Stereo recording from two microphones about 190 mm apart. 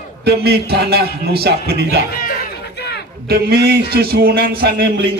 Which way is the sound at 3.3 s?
60° right (ahead or behind).